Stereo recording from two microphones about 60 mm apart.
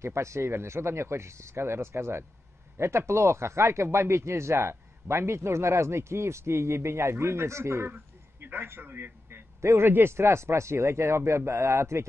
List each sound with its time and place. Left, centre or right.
0.0 s speech: right
7.9 s a sound: right
9.8 s speech: right